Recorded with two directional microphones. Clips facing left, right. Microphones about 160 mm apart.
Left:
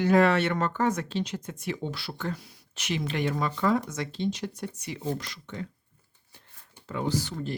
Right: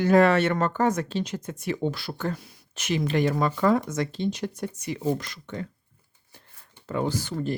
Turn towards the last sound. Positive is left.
turn(degrees=-50)  # may be behind; listen again after turning